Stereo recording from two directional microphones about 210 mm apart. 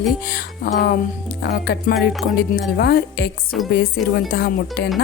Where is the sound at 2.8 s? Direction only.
50° left (ahead or behind).